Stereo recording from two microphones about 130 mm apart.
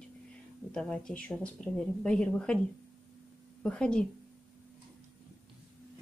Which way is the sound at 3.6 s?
5° left (ahead or behind).